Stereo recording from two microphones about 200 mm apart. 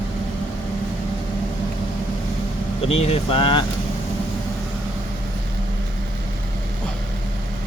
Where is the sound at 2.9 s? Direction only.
30° left (ahead or behind).